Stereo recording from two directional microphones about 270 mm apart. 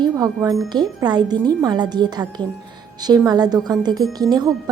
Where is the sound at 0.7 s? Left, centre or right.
Centre.